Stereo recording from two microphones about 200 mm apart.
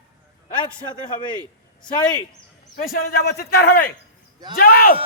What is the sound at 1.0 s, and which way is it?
Speech, 20° left (ahead or behind).